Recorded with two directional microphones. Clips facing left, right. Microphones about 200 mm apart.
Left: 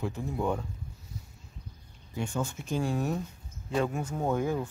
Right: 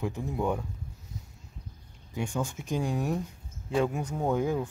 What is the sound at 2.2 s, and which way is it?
Speech, 15° right (ahead or behind).